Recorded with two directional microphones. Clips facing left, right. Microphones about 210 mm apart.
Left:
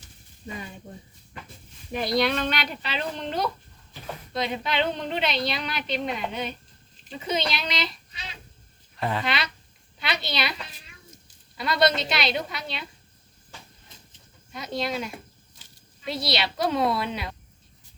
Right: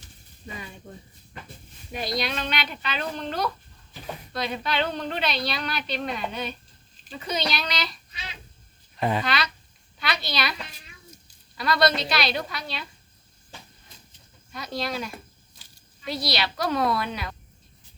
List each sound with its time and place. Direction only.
2.1 s speech: 55° left (ahead or behind)
2.8 s a woman's voice: 25° left (ahead or behind)
9.0 s speech: 20° right (ahead or behind)
9.2 s a woman's voice: 25° left (ahead or behind)
11.5 s a woman's voice: 20° left (ahead or behind)
14.5 s a woman's voice: 20° left (ahead or behind)